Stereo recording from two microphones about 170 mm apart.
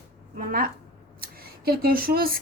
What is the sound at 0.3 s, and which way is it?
A woman's voice, 55° right (ahead or behind).